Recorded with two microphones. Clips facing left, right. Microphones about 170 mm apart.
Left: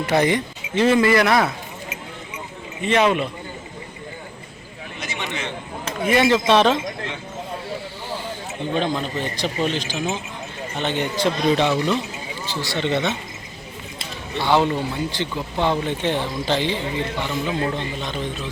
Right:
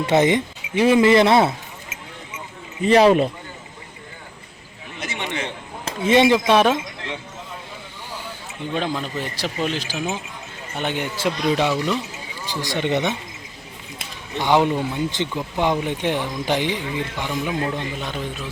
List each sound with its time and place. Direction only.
0.0 s speech: 20° right (ahead or behind)
0.7 s speech: 10° right (ahead or behind)
2.8 s speech: 35° right (ahead or behind)
4.9 s a sound: 30° right (ahead or behind); by 6.7 s 10° right (ahead or behind)
8.7 s speech: 5° right (ahead or behind)
14.3 s speech: 15° right (ahead or behind)